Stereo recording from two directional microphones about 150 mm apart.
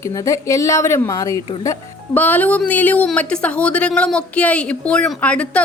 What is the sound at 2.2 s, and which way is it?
A woman's voice, 10° left (ahead or behind).